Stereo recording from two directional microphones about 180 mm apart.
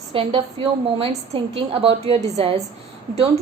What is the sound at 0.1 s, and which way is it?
A woman's voice, 30° right (ahead or behind).